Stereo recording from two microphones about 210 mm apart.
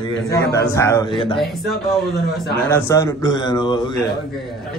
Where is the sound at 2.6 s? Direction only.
15° left (ahead or behind).